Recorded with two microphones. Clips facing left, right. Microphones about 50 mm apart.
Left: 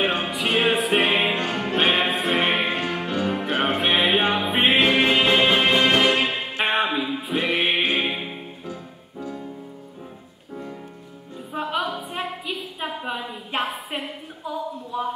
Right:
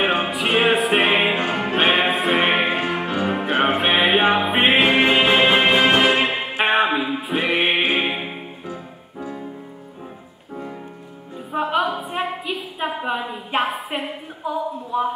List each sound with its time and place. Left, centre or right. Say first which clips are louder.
0.0 s music: right 3 dB; centre
6.6 s music: right 4 dB; centre
7.0 s music: right 2 dB; centre
11.5 s music: right 5 dB; centre
12.4 s a sound: right 4 dB; centre